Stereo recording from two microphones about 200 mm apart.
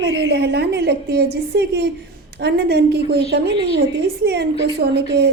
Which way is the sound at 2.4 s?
55° right (ahead or behind).